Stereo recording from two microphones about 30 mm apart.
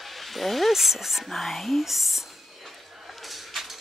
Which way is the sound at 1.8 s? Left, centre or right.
Centre.